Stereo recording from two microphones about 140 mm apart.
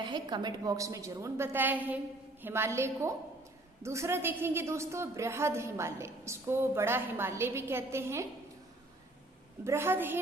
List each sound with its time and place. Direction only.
0.0 s a woman's voice: 35° right (ahead or behind)
9.6 s a woman's voice: 15° right (ahead or behind)